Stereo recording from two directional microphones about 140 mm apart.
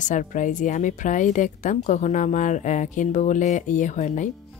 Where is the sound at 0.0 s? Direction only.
65° left (ahead or behind).